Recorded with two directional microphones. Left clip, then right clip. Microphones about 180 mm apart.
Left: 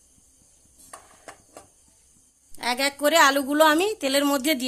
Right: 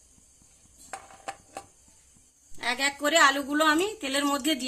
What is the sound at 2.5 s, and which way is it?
A woman's voice, 60° left (ahead or behind).